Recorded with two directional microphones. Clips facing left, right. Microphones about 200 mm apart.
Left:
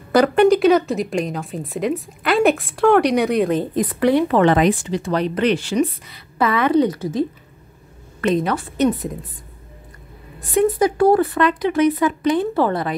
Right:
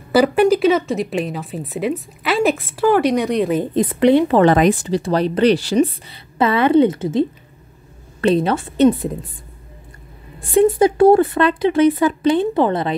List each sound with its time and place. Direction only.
0.1 s a woman's voice: 5° right (ahead or behind)
3.7 s speech: 25° right (ahead or behind)
10.5 s speech: 25° right (ahead or behind)